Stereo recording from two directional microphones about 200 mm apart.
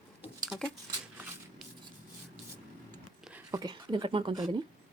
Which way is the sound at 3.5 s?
20° right (ahead or behind).